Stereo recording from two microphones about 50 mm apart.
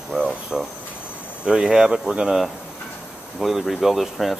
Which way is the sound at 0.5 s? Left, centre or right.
Centre.